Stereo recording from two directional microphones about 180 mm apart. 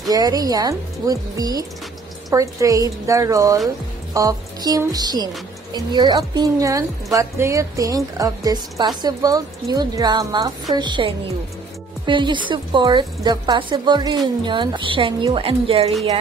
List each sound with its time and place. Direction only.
0.1 s speech: 20° right (ahead or behind)